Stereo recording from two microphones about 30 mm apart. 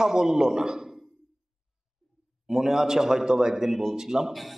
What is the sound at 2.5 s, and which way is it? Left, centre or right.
A man's voice, centre.